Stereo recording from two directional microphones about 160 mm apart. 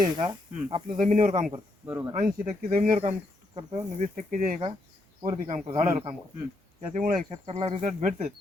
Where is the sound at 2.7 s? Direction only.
50° right (ahead or behind).